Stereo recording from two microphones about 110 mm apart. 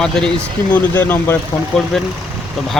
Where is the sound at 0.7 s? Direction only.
20° left (ahead or behind).